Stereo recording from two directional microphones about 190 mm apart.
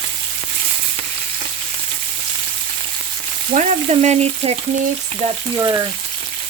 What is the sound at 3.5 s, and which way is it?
Speech, 40° right (ahead or behind).